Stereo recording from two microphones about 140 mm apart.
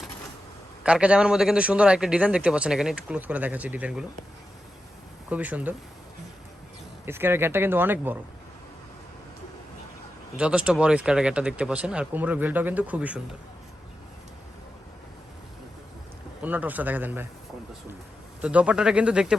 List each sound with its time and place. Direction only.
0.9 s a man's voice: 5° right (ahead or behind)
5.3 s a man's voice: 10° right (ahead or behind)
7.0 s a man's voice: 15° right (ahead or behind)
10.3 s a man's voice: 5° right (ahead or behind)
16.4 s a man's voice: 10° right (ahead or behind)
18.4 s a man's voice: 10° right (ahead or behind)